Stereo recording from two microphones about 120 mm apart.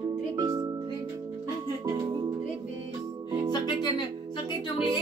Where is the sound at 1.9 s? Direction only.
35° right (ahead or behind).